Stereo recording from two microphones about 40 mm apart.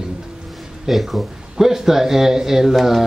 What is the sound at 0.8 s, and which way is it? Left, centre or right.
Speech, centre.